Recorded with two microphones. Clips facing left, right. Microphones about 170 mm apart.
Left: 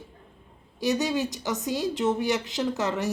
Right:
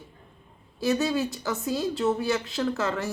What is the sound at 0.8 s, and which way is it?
Speech, 15° left (ahead or behind).